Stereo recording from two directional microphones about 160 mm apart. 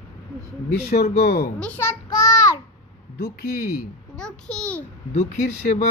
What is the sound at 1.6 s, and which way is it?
Speech, 15° left (ahead or behind).